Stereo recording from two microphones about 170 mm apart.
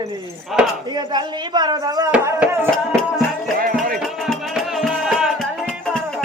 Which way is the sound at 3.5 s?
55° right (ahead or behind).